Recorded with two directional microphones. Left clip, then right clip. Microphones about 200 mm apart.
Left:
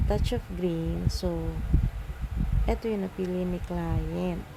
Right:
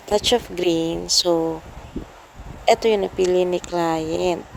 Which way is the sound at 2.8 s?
45° right (ahead or behind).